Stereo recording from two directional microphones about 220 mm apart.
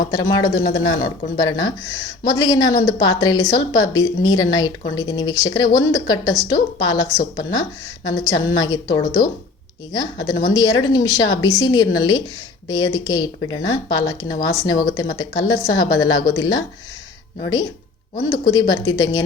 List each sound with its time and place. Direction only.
0.1 s speech: 15° left (ahead or behind)